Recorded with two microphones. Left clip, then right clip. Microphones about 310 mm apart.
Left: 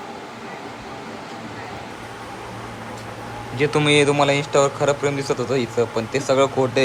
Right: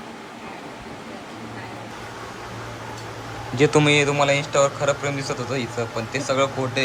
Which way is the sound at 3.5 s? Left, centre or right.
Centre.